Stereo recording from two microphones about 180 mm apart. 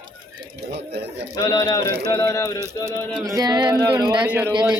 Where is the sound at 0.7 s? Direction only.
65° right (ahead or behind).